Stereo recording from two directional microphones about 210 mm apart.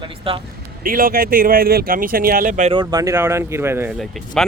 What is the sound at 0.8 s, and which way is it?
Speech, 45° right (ahead or behind).